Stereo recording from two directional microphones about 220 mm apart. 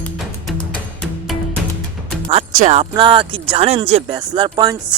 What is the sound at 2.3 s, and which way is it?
Speech, 35° right (ahead or behind).